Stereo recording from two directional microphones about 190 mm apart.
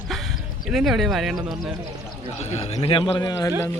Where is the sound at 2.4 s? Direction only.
35° left (ahead or behind); by 3.5 s 20° left (ahead or behind).